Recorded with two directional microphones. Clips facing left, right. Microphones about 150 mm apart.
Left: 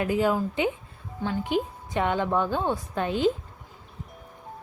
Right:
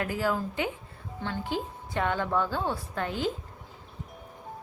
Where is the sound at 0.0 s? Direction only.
20° left (ahead or behind).